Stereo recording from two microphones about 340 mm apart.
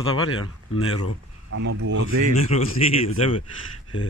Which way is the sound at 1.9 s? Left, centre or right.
Right.